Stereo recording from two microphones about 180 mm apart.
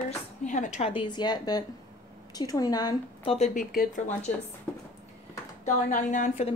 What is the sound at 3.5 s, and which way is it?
Speech, 50° left (ahead or behind).